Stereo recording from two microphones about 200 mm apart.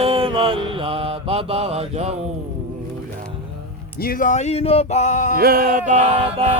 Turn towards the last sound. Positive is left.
turn(degrees=-30)  # may be behind; listen again after turning